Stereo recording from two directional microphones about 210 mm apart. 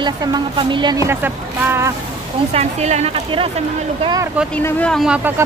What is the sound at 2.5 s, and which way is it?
Speech, 30° right (ahead or behind).